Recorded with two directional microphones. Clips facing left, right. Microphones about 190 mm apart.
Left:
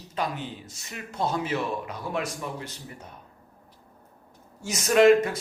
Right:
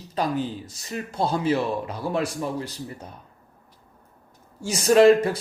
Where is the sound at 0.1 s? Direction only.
35° right (ahead or behind).